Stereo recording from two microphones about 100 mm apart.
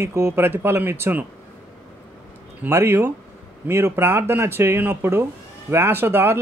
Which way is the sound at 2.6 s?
25° right (ahead or behind).